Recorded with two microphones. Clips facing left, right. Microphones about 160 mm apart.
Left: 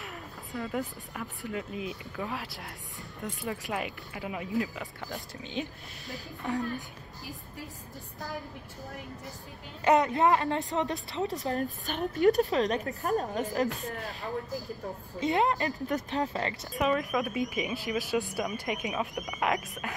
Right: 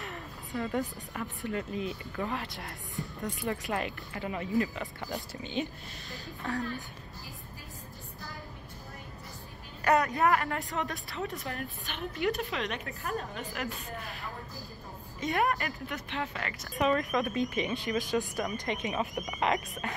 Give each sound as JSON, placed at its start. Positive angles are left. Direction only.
{"t": 0.0, "sound": "speech", "side_deg": 0}
{"t": 6.4, "sound": "speech", "side_deg": 15}
{"t": 9.8, "sound": "a woman's voice", "side_deg": 20}
{"t": 11.3, "sound": "a woman's voice", "side_deg": 40}
{"t": 15.1, "sound": "a woman's voice", "side_deg": 25}
{"t": 15.9, "sound": "a woman's voice", "side_deg": 35}
{"t": 16.7, "sound": "speech", "side_deg": 5}